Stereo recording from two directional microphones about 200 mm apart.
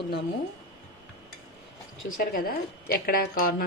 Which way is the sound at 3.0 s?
50° left (ahead or behind).